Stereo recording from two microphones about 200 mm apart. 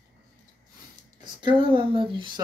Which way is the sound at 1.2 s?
25° right (ahead or behind).